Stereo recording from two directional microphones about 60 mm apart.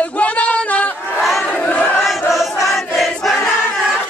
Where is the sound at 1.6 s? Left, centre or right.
Left.